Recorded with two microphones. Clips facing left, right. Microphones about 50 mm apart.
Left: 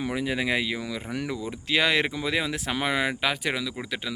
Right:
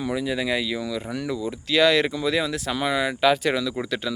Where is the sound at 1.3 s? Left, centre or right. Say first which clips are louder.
Right 3 dB; centre.